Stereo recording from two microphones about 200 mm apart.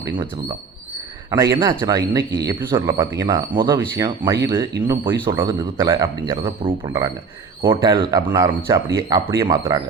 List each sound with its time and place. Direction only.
0.0 s speech: 20° right (ahead or behind)